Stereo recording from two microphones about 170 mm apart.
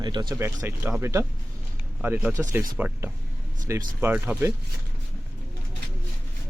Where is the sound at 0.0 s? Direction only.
25° right (ahead or behind).